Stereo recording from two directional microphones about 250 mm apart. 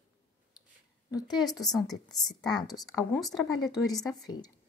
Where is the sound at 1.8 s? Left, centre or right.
Centre.